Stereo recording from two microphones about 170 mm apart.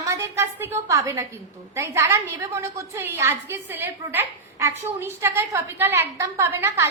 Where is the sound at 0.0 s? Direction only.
20° right (ahead or behind).